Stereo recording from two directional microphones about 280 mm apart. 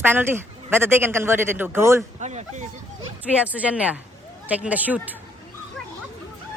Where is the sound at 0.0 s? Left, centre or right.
Centre.